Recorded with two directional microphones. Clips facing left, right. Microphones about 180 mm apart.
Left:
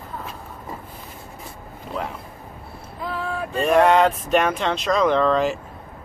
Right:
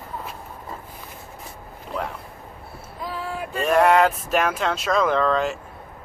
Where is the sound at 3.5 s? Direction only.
Centre (ahead or behind).